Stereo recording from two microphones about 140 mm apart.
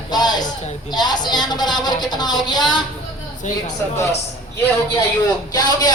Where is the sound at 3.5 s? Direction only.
60° left (ahead or behind).